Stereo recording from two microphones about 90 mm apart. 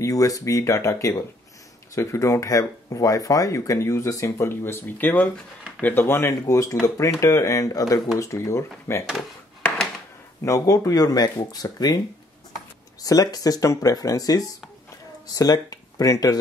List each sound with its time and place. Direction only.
0.0 s speech: 40° left (ahead or behind)
10.4 s speech: 35° left (ahead or behind)
13.0 s speech: 40° left (ahead or behind)